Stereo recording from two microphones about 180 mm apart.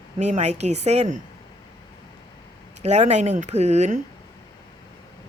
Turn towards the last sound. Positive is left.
turn(degrees=-40)  # may be behind; listen again after turning